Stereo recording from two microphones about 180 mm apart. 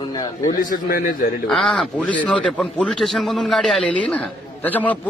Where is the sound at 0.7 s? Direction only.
50° left (ahead or behind).